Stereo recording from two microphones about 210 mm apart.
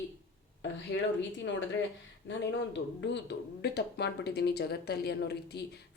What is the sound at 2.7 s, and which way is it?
A woman's voice, 55° left (ahead or behind).